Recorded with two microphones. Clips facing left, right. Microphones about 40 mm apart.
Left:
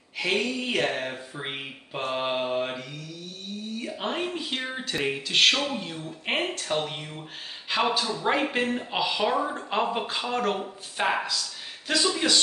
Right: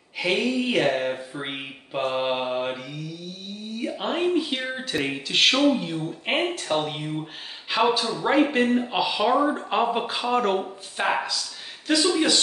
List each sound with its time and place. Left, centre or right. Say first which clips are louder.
0.2 s speech: right 3 dB; centre